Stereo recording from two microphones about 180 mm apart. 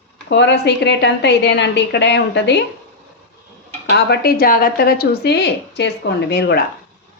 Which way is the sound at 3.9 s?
65° left (ahead or behind).